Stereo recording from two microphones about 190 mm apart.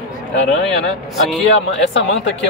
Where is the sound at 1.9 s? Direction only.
70° left (ahead or behind).